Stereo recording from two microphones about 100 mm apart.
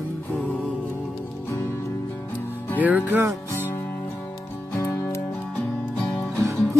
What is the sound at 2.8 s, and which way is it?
Music, 15° right (ahead or behind).